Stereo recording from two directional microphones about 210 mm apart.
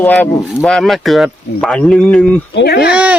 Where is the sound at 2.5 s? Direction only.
50° left (ahead or behind).